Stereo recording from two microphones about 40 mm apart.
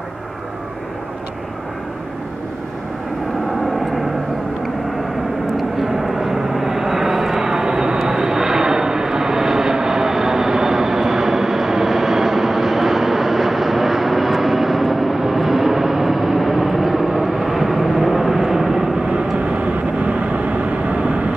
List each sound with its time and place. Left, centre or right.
5.9 s vehicle: centre
19.5 s vehicle: right